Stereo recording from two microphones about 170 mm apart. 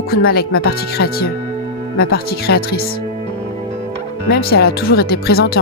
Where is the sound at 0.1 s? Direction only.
65° left (ahead or behind).